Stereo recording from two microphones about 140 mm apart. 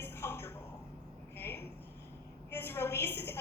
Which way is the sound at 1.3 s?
15° left (ahead or behind).